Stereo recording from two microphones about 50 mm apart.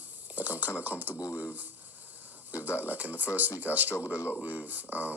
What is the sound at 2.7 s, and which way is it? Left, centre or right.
Speech, right.